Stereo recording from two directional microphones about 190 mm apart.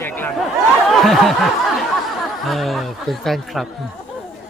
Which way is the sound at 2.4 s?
Centre (ahead or behind).